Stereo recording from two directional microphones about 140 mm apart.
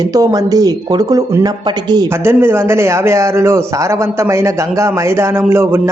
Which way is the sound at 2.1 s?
15° right (ahead or behind).